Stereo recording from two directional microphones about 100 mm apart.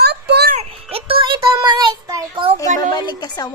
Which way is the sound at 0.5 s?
75° right (ahead or behind).